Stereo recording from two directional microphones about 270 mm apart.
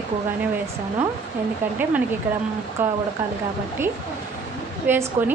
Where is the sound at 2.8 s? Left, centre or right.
Centre.